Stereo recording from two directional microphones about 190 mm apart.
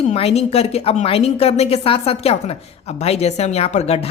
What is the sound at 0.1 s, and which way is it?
A woman's voice, 35° left (ahead or behind).